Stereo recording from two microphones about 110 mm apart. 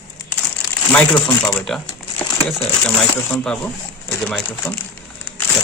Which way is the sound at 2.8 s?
5° left (ahead or behind).